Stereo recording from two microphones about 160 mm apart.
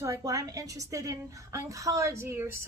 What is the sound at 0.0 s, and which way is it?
A woman's voice, 20° right (ahead or behind).